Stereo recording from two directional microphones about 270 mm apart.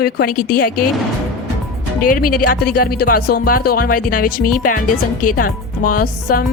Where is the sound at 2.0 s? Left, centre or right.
Left.